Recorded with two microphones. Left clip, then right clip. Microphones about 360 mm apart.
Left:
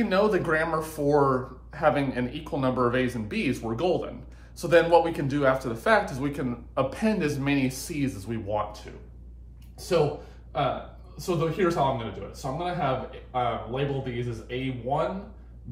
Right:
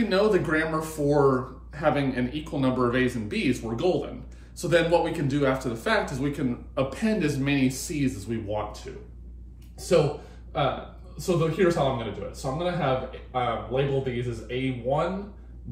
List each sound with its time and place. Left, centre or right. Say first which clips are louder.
0.0 s speech: right 1 dB; centre
11.1 s speech: right 2 dB; centre